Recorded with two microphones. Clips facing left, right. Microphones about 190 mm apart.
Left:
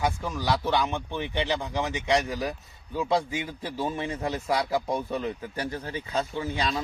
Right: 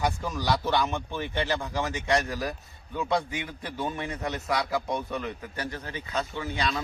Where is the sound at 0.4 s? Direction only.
10° left (ahead or behind).